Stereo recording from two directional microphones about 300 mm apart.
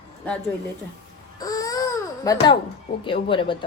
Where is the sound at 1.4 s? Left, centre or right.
Centre.